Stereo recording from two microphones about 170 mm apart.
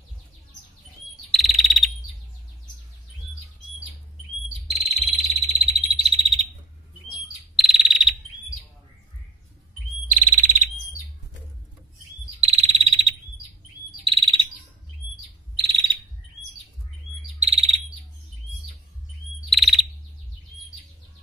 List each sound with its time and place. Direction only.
1.3 s insect: centre (ahead or behind)
4.6 s bird: 35° right (ahead or behind)
5.4 s frog: 35° right (ahead or behind)
7.5 s insect: centre (ahead or behind)
10.1 s bird: 45° right (ahead or behind)
12.4 s insect: 35° right (ahead or behind)
14.0 s chirp: 30° right (ahead or behind)
15.5 s bird: 30° right (ahead or behind)
17.4 s bird: 35° right (ahead or behind)
19.5 s chirp: centre (ahead or behind)